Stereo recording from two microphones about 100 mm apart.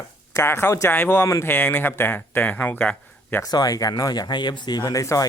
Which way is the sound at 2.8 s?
20° left (ahead or behind).